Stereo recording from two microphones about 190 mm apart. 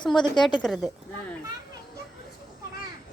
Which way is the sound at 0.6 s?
Centre (ahead or behind).